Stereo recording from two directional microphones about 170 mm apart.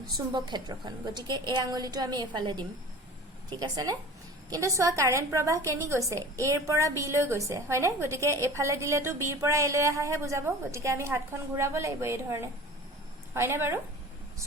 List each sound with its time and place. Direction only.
0.3 s a woman's voice: 25° right (ahead or behind)